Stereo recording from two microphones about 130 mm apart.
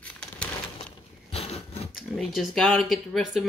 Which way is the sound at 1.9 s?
Centre (ahead or behind).